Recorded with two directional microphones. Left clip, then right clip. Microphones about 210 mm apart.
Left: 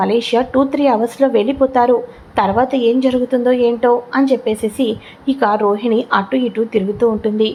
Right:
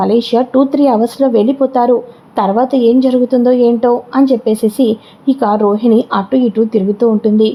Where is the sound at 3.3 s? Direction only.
20° right (ahead or behind).